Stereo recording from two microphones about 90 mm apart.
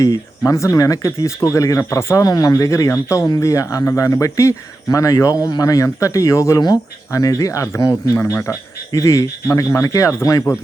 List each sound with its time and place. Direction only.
0.0 s speech: 35° left (ahead or behind)
6.6 s speech: 50° left (ahead or behind)
7.2 s speech: 40° left (ahead or behind)
8.1 s speech: 30° left (ahead or behind)